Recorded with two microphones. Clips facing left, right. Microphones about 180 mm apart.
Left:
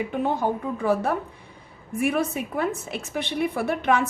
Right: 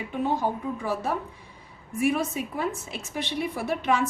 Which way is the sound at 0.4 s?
50° left (ahead or behind).